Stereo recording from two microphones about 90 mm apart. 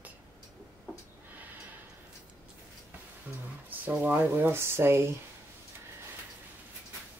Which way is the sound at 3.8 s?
15° right (ahead or behind).